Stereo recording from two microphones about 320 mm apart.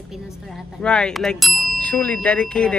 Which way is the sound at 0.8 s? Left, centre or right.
Centre.